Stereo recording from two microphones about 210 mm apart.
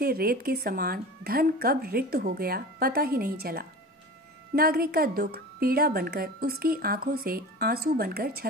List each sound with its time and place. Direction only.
0.0 s a woman's voice: 45° right (ahead or behind)